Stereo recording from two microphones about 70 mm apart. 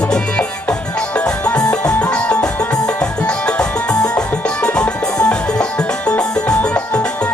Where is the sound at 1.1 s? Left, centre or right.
Centre.